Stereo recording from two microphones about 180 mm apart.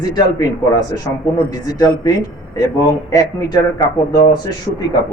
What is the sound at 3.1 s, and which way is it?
Speech, 20° left (ahead or behind).